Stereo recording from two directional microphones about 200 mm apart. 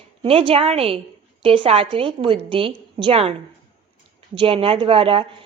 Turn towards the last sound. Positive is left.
turn(degrees=-25)  # may be behind; listen again after turning